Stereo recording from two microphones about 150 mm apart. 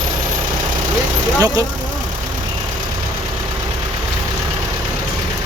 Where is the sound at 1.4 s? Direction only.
20° right (ahead or behind).